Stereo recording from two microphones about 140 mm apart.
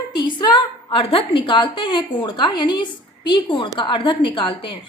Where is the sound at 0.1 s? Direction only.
30° left (ahead or behind).